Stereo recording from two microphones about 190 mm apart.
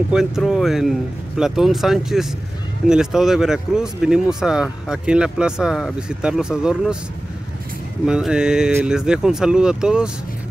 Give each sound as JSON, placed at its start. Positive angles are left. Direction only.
{"t": 0.1, "sound": "speech", "side_deg": 0}
{"t": 8.0, "sound": "speech", "side_deg": -5}